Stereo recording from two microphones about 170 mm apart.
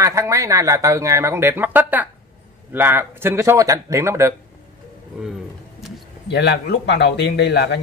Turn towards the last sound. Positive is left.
turn(degrees=85)